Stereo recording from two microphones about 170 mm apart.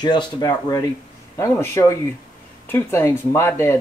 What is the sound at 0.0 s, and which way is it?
Speech, 25° left (ahead or behind).